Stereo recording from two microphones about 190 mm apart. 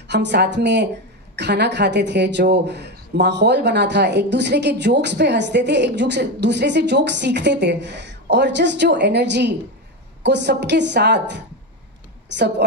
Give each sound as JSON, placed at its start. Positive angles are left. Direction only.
{"t": 0.1, "sound": "a woman's voice", "side_deg": -65}